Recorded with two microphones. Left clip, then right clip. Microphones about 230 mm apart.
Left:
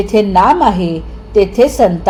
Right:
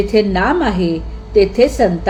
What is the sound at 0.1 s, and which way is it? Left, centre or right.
A woman's voice, centre.